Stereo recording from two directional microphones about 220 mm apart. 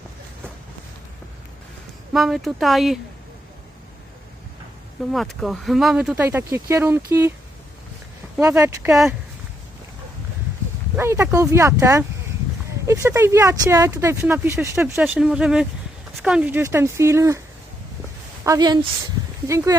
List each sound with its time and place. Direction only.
2.1 s speech: centre (ahead or behind)
5.1 s speech: centre (ahead or behind)
8.4 s speech: 10° right (ahead or behind)
10.9 s speech: 10° right (ahead or behind)
18.4 s speech: 15° right (ahead or behind)